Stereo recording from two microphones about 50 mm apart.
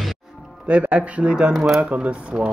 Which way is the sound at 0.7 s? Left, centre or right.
Right.